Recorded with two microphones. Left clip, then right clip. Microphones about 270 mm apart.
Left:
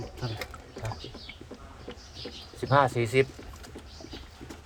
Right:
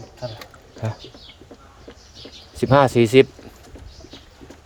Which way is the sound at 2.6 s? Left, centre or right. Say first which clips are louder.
Right 9 dB; right.